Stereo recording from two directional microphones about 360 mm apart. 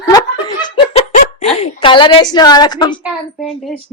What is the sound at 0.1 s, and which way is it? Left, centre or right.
Laughter, centre.